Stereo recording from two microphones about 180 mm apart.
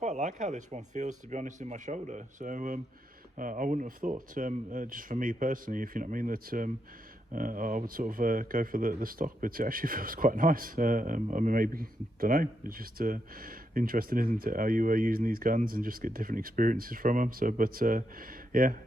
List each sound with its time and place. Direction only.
0.0 s speech: 40° right (ahead or behind)